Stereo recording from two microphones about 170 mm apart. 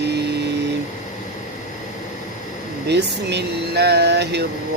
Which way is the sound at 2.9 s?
85° right.